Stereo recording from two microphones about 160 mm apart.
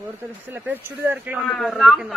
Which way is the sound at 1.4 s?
Centre (ahead or behind).